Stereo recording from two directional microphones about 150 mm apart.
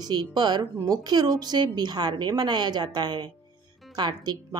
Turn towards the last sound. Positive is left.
turn(degrees=-25)  # may be behind; listen again after turning